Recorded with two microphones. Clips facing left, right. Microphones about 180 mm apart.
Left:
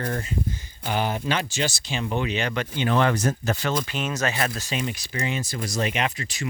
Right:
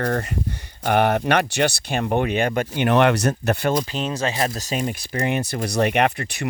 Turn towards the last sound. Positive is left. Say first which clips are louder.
# right 7 dB
turn(degrees=-60)  # may be behind; listen again after turning